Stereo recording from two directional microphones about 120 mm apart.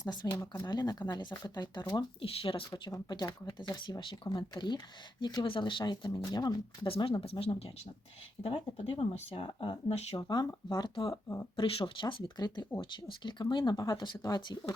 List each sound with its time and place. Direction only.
0.0 s speech: 35° left (ahead or behind)
2.2 s speech: 50° left (ahead or behind)
2.9 s speech: 35° left (ahead or behind)
6.9 s speech: 45° left (ahead or behind)
10.2 s speech: 35° left (ahead or behind)
11.1 s speech: 25° left (ahead or behind)
11.5 s speech: 45° left (ahead or behind)